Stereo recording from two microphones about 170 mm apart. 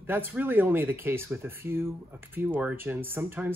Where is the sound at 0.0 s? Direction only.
10° right (ahead or behind).